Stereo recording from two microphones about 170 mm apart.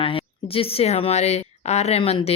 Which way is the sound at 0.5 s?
35° left (ahead or behind).